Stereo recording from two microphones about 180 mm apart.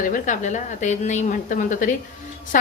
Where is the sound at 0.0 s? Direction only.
45° left (ahead or behind).